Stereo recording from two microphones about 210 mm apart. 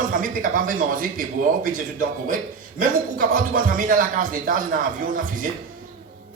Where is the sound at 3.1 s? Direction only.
40° right (ahead or behind).